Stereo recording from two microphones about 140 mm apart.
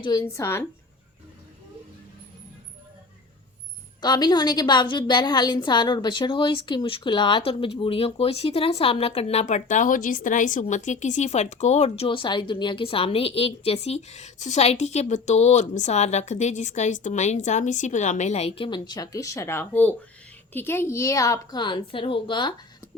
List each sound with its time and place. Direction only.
0.0 s a woman's voice: 30° left (ahead or behind)
4.0 s a woman's voice: 30° left (ahead or behind); by 12.0 s 50° left (ahead or behind)
12.0 s a woman's voice: 35° left (ahead or behind)